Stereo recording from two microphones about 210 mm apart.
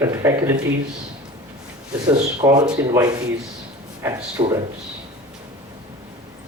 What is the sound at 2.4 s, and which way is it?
Speech, 20° right (ahead or behind).